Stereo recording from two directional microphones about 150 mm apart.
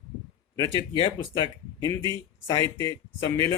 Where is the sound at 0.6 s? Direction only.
35° left (ahead or behind).